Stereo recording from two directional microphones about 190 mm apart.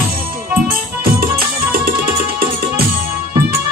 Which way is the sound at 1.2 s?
50° right (ahead or behind).